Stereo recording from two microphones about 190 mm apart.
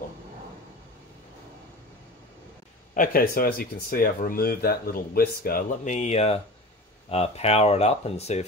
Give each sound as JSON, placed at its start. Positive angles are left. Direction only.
{"t": 2.9, "sound": "speech", "side_deg": 45}